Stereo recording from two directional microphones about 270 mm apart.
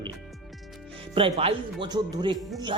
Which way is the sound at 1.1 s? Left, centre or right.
Centre.